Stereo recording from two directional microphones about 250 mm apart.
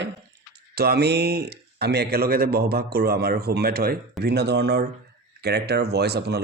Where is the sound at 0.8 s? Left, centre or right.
Right.